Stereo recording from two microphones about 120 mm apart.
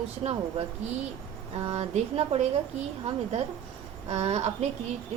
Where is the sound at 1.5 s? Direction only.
55° right (ahead or behind).